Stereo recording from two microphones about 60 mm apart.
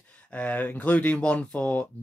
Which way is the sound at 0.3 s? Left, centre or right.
Left.